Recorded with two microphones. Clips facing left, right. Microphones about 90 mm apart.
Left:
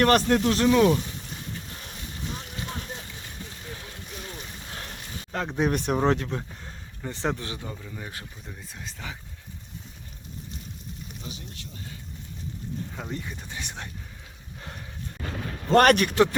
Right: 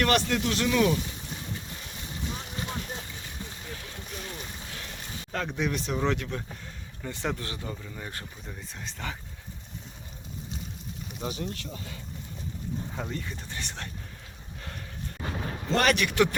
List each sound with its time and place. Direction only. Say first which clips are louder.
0.0 s speech: left 5 dB; 40° left (ahead or behind)
5.3 s speech: left 2 dB; 25° left (ahead or behind)
5.5 s speech: left 7 dB; 40° left (ahead or behind); by 7.8 s 15° left (ahead or behind)
7.8 s speech: left 1 dB; centre (ahead or behind)
11.2 s speech: right 12 dB; 60° right (ahead or behind); by 11.9 s 75° right (ahead or behind)
13.1 s speech: left 1 dB; 15° left (ahead or behind)
14.6 s dog: left 1 dB; 20° left (ahead or behind)
15.7 s a man's voice: left 7 dB; 50° left (ahead or behind)